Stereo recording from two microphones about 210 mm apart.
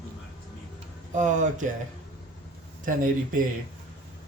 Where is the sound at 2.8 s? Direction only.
40° right (ahead or behind).